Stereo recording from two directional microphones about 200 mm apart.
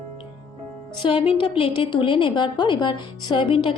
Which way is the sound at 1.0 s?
25° left (ahead or behind).